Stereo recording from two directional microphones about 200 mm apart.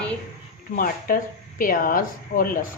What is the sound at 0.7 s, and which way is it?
Speech, 45° left (ahead or behind).